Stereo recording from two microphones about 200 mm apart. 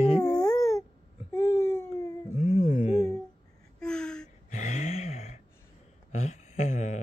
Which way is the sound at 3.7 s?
5° left (ahead or behind).